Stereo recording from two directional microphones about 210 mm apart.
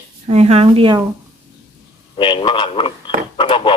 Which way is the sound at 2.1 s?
25° left (ahead or behind).